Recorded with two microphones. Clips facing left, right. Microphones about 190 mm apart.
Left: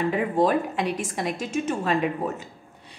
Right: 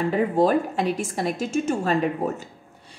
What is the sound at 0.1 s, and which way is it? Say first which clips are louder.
A woman's voice: right 5 dB; 40° right (ahead or behind).